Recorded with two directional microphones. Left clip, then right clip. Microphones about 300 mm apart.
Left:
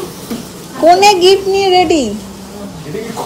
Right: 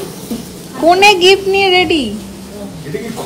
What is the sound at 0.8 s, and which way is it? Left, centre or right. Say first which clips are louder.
A woman's voice: left 1 dB; centre.